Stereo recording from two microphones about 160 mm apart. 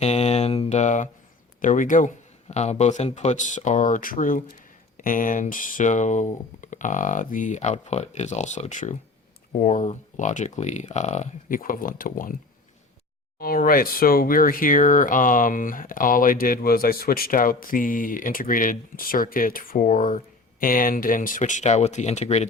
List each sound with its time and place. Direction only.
0.0 s mantra: 45° left (ahead or behind)
1.6 s speech: 55° left (ahead or behind)
13.4 s speech: 65° left (ahead or behind); by 22.4 s 45° left (ahead or behind)